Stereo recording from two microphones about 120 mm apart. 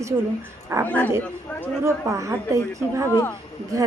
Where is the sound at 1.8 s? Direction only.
25° right (ahead or behind).